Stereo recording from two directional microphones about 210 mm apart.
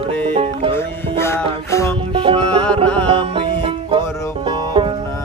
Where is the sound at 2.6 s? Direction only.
5° left (ahead or behind).